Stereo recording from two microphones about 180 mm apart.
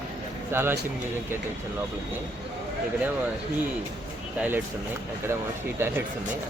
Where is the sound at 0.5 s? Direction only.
15° right (ahead or behind).